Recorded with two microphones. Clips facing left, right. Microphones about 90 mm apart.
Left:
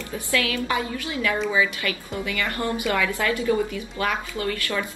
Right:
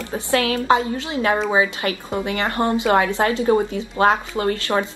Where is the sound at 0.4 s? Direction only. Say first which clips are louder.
Right 8 dB; 30° right (ahead or behind).